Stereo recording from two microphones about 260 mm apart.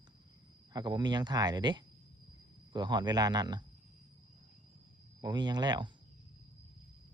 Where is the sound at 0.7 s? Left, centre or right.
Centre.